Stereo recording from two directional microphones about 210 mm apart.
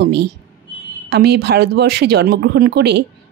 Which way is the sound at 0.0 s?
55° right (ahead or behind).